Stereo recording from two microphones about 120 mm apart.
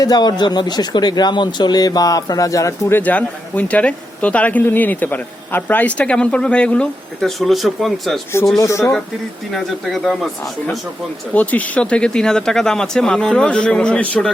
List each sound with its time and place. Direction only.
0.0 s speech: 35° left (ahead or behind)
3.0 s a man's voice: 10° left (ahead or behind)
8.5 s speech: 25° left (ahead or behind)
9.5 s speech: centre (ahead or behind)
11.3 s a man's voice: 10° left (ahead or behind)